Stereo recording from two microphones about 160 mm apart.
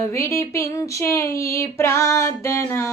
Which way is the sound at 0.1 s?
15° left (ahead or behind).